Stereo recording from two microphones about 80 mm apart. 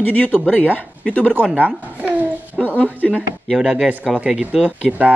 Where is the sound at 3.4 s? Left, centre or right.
Centre.